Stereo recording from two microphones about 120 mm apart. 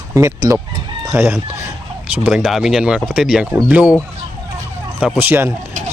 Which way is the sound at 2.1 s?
10° right (ahead or behind).